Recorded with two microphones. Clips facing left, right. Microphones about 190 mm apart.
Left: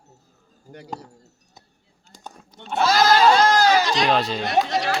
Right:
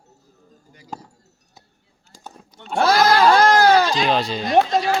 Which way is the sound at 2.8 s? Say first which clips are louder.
Right 1 dB; 60° right (ahead or behind).